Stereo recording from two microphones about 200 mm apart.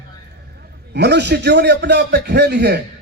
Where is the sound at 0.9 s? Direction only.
60° right (ahead or behind).